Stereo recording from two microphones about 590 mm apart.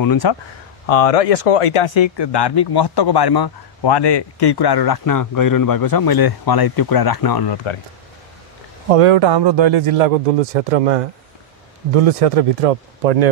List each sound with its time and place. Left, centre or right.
0.0 s speech: left
0.8 s speech: left
8.8 s speech: right
9.9 s a man's voice: right
11.9 s speech: right